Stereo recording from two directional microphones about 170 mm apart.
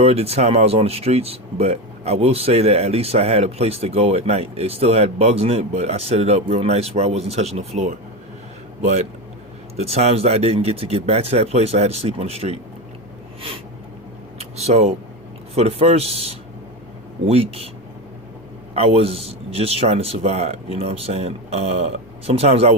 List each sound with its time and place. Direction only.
0.0 s speech: 35° right (ahead or behind)
9.7 s speech: 40° right (ahead or behind)
14.3 s a sound: 40° right (ahead or behind)
15.5 s speech: 40° right (ahead or behind)
18.7 s speech: 35° right (ahead or behind)